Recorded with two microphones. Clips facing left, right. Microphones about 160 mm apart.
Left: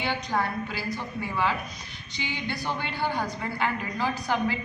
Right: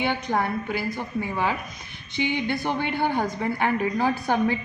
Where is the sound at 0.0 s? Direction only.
55° right (ahead or behind).